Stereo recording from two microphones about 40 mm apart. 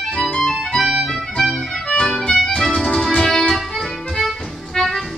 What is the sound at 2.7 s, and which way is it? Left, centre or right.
Music, centre.